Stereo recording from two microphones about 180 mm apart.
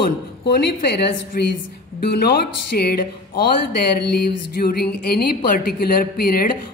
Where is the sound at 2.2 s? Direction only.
60° left (ahead or behind).